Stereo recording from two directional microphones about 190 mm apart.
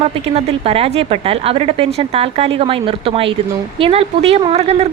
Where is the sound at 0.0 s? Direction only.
30° right (ahead or behind).